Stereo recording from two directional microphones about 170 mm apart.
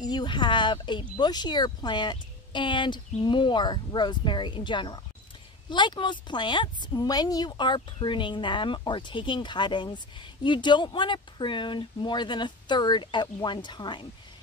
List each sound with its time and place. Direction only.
0.0 s speech: 25° left (ahead or behind)